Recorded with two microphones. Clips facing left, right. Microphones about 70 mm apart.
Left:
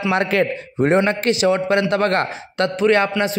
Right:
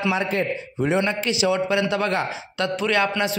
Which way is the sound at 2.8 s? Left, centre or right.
Left.